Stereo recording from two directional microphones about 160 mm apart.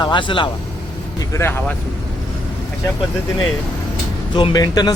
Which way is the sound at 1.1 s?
15° left (ahead or behind).